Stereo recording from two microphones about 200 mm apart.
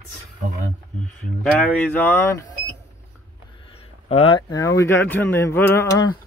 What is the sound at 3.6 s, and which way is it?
Speech, 30° left (ahead or behind).